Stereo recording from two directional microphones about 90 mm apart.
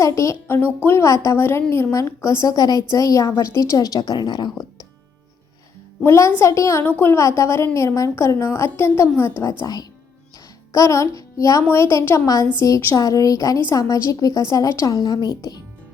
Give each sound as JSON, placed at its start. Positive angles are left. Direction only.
{"t": 0.0, "sound": "a woman's voice", "side_deg": 35}
{"t": 6.1, "sound": "a woman's voice", "side_deg": 30}